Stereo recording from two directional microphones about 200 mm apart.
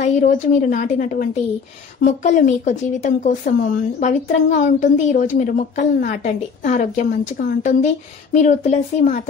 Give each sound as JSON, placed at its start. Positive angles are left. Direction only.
{"t": 0.0, "sound": "a woman's voice", "side_deg": 40}